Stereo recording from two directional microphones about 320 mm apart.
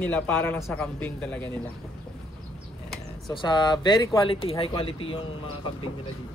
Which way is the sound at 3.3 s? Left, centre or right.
Centre.